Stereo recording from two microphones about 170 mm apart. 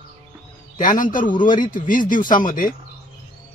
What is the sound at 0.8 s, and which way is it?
Speech, 50° left (ahead or behind).